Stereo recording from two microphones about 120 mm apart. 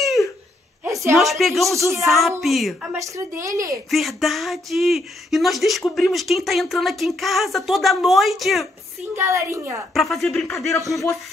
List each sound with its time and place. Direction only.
0.8 s a sound: 25° right (ahead or behind)
1.1 s speech: centre (ahead or behind)
3.0 s a woman's voice: 25° right (ahead or behind)
3.9 s speech: centre (ahead or behind)
9.1 s a woman's voice: 25° right (ahead or behind)
9.9 s speech: centre (ahead or behind)